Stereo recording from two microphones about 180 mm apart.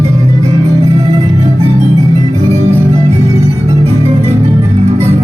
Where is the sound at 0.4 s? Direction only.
35° right (ahead or behind).